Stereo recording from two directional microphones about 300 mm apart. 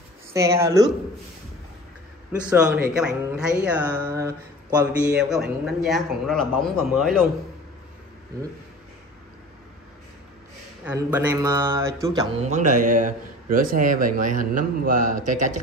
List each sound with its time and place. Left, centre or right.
0.3 s speech: centre
2.5 s speech: centre
10.9 s speech: centre; by 15.6 s right